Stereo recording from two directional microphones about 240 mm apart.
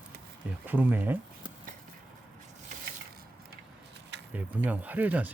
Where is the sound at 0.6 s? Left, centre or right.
Centre.